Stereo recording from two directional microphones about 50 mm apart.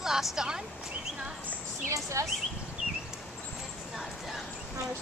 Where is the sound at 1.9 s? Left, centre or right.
Right.